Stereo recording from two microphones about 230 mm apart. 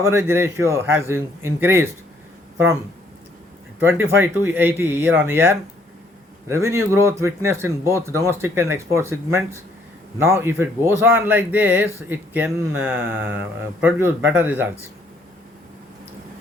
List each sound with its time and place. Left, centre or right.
0.0 s speech: centre
3.8 s speech: centre